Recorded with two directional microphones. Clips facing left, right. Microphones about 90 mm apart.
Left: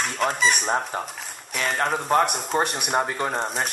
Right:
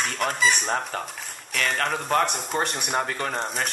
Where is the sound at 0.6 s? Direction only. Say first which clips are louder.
Left 2 dB; 20° left (ahead or behind).